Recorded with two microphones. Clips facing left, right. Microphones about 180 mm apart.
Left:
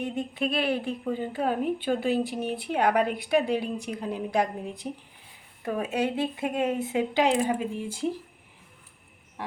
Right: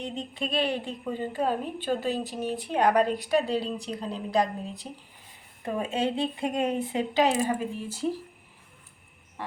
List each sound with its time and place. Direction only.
0.3 s a woman's voice: 5° left (ahead or behind)
7.3 s speech: centre (ahead or behind)
7.6 s a woman's voice: 15° left (ahead or behind)